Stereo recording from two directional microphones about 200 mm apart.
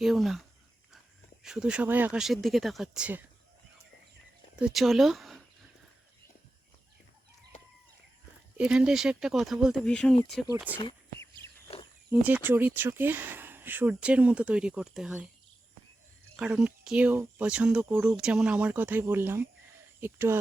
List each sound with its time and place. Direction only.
0.0 s speech: centre (ahead or behind)
4.6 s speech: centre (ahead or behind)
8.5 s speech: 5° right (ahead or behind)
12.1 s speech: 10° right (ahead or behind)
16.4 s speech: 5° right (ahead or behind)